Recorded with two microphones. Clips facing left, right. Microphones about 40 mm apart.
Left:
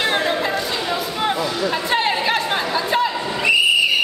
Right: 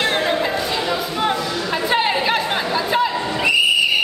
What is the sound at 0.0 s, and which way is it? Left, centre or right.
Chatter, centre.